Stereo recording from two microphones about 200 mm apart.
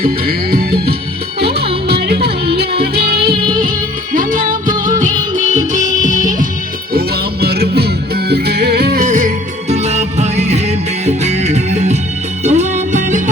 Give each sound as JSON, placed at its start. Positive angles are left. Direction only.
{"t": 0.0, "sound": "music", "side_deg": -50}
{"t": 7.4, "sound": "music", "side_deg": -50}